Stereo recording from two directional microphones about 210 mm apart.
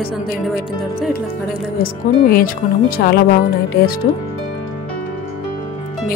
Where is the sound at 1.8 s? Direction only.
45° left (ahead or behind).